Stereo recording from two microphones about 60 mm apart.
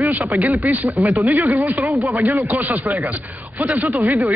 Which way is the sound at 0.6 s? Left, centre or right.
Right.